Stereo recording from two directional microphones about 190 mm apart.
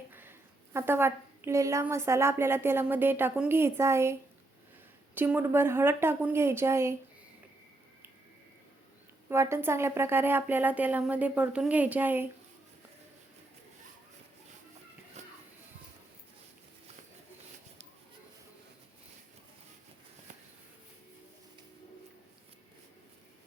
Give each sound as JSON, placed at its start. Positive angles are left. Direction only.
{"t": 0.1, "sound": "a woman's voice", "side_deg": -10}
{"t": 9.3, "sound": "speech", "side_deg": -15}
{"t": 15.2, "sound": "a sound", "side_deg": -40}